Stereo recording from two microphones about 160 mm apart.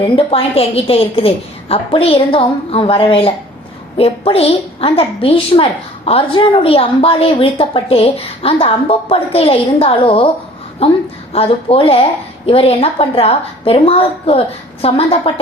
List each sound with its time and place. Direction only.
0.0 s a woman's voice: 35° left (ahead or behind)